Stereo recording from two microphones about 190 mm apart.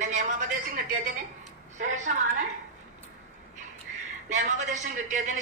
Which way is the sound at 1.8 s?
40° right (ahead or behind).